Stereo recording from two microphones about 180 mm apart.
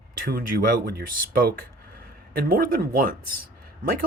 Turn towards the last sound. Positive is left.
turn(degrees=-55)  # may be behind; listen again after turning